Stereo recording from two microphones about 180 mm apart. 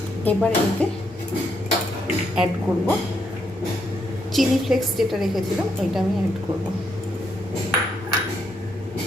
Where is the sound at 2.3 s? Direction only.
5° right (ahead or behind).